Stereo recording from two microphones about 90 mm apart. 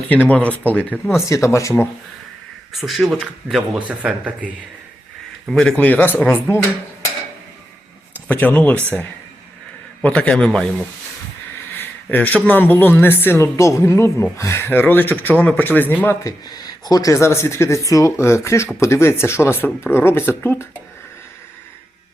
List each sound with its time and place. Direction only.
0.1 s speech: 15° left (ahead or behind)
1.3 s speech: 35° left (ahead or behind)
2.8 s speech: 5° right (ahead or behind)
3.8 s a man's voice: 15° right (ahead or behind)
5.5 s speech: 5° left (ahead or behind)
5.7 s speech: 20° left (ahead or behind)
8.3 s speech: 15° left (ahead or behind)
12.1 s speech: 20° left (ahead or behind)
16.2 s speech: 45° left (ahead or behind); by 20.7 s 25° left (ahead or behind)